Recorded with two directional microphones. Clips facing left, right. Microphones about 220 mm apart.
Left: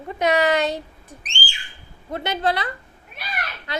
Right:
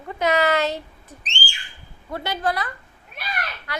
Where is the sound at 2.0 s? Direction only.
20° left (ahead or behind).